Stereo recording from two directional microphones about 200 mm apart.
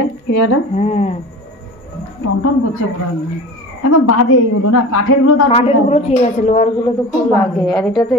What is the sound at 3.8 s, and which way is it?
Speech, 90° left.